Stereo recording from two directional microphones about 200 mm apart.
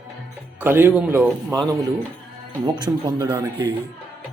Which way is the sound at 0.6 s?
10° right (ahead or behind).